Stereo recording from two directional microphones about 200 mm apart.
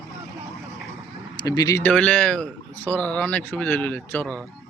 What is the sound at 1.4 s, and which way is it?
Speech, 20° left (ahead or behind).